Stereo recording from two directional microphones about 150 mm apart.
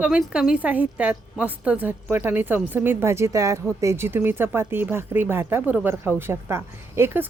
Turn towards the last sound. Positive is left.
turn(degrees=-15)  # may be behind; listen again after turning